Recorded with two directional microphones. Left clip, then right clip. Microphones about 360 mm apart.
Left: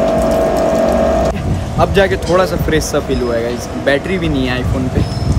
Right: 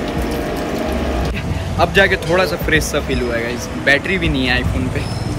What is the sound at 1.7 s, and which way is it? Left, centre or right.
Speech, centre.